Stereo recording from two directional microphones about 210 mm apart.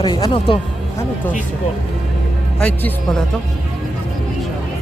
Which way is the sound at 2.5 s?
5° left (ahead or behind).